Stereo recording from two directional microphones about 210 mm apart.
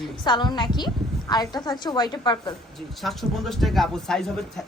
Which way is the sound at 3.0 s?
Centre (ahead or behind).